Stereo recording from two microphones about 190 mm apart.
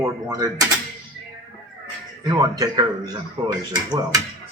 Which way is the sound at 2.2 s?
20° right (ahead or behind).